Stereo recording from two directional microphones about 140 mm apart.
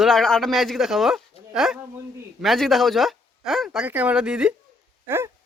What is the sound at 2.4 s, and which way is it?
Speech, centre (ahead or behind).